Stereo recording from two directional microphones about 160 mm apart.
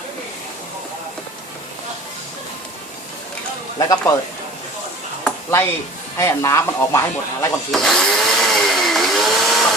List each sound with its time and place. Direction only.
3.8 s speech: 20° left (ahead or behind)
5.2 s a sound: 15° left (ahead or behind)
6.1 s speech: 20° left (ahead or behind)
7.7 s chainsaw: centre (ahead or behind)